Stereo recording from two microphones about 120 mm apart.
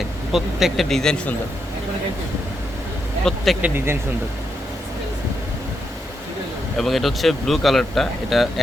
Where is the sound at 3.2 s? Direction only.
5° left (ahead or behind).